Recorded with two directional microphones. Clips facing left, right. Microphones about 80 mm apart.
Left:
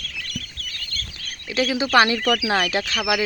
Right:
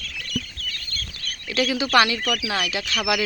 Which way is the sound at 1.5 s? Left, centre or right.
Centre.